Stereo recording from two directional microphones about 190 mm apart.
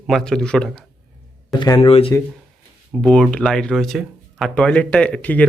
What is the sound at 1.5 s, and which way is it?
Speech, 20° left (ahead or behind).